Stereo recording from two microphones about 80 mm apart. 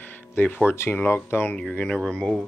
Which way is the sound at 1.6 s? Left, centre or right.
Centre.